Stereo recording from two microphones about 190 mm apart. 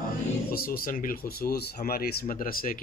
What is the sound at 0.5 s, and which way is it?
Speech, 50° left (ahead or behind).